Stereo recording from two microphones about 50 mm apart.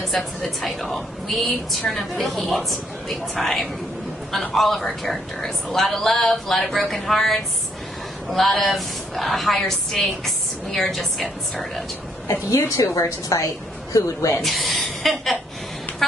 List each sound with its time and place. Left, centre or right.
0.0 s a woman's voice: centre
12.3 s a woman's voice: left
14.4 s a woman's voice: centre
16.0 s music: centre